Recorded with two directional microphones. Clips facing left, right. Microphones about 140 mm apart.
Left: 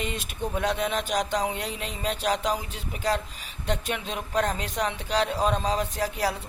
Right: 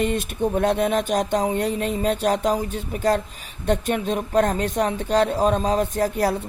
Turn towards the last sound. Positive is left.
turn(degrees=-50)  # may be behind; listen again after turning